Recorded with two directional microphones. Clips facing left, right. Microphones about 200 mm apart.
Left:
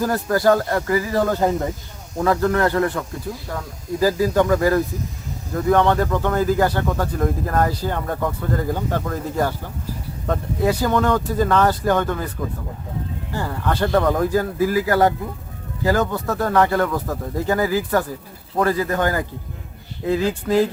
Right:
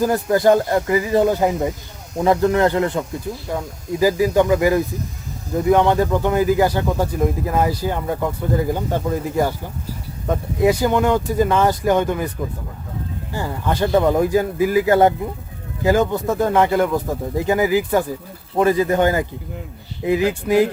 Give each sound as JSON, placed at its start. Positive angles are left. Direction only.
{"t": 0.0, "sound": "speech", "side_deg": -20}
{"t": 4.0, "sound": "speech", "side_deg": -15}
{"t": 13.3, "sound": "speech", "side_deg": -15}